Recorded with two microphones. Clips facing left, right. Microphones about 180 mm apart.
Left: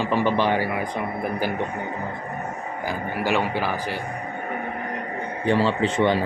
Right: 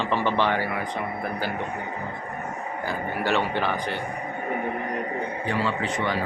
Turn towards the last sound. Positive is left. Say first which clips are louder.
# left 6 dB
turn(degrees=25)  # may be behind; listen again after turning